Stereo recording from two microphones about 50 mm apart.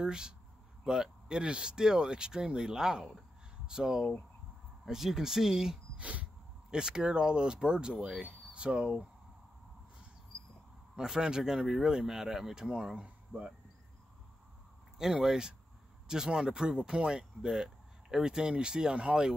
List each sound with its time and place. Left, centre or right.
0.0 s speech: centre
5.9 s a sound: right
6.7 s speech: centre
11.0 s speech: centre
15.0 s speech: centre